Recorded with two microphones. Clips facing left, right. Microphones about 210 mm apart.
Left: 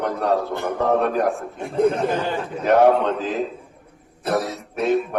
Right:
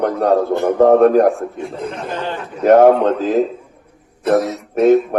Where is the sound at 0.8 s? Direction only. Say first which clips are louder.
Right 10 dB; 45° right (ahead or behind).